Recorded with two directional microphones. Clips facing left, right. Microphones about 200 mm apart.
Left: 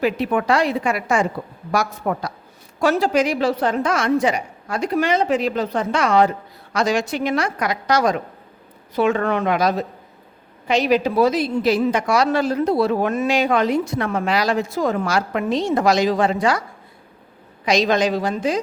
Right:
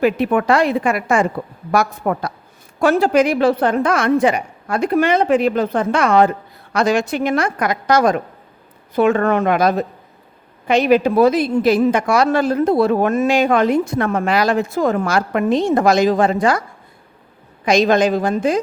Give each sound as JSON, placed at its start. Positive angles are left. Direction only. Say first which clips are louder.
{"t": 0.0, "sound": "a woman's voice", "louder": "right 4 dB", "side_deg": -55}
{"t": 17.7, "sound": "a woman's voice", "louder": "right 4 dB", "side_deg": -50}